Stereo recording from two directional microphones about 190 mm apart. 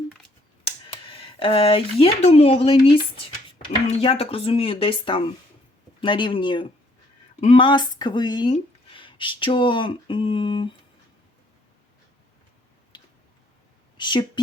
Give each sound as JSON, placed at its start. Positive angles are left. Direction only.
{"t": 0.6, "sound": "speech", "side_deg": 30}
{"t": 12.9, "sound": "a sound", "side_deg": 25}
{"t": 13.9, "sound": "speech", "side_deg": 25}